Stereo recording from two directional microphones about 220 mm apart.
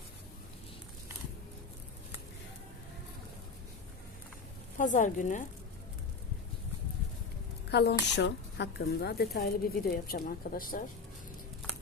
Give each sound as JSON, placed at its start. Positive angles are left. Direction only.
{"t": 4.8, "sound": "speech", "side_deg": 35}
{"t": 7.7, "sound": "a woman's voice", "side_deg": 50}